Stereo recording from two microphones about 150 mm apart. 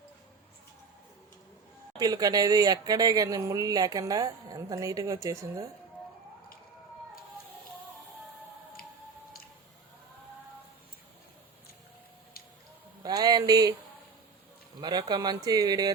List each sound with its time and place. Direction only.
2.0 s speech: 25° right (ahead or behind)
13.0 s a sound: 25° right (ahead or behind)
14.8 s speech: 30° right (ahead or behind)